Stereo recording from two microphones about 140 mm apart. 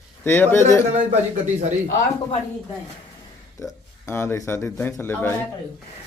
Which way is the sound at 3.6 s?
20° left (ahead or behind).